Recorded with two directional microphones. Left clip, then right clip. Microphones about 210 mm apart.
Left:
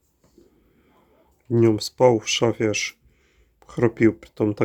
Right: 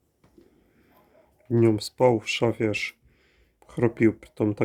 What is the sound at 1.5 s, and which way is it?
Speech, 5° left (ahead or behind).